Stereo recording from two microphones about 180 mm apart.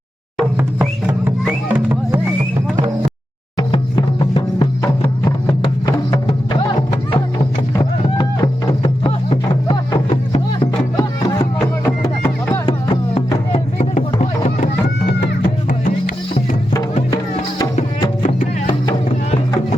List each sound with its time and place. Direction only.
1.7 s music: 10° right (ahead or behind)
3.6 s music: 30° left (ahead or behind)
8.2 s music: 25° left (ahead or behind)
11.9 s music: 10° left (ahead or behind)
12.6 s music: 30° left (ahead or behind)
13.5 s a sound: 40° left (ahead or behind)
18.0 s music: 40° left (ahead or behind)
18.7 s music: 25° left (ahead or behind)